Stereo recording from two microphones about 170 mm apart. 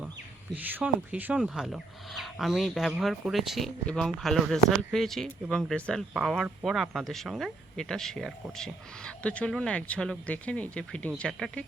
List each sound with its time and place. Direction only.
0.5 s speech: 10° right (ahead or behind)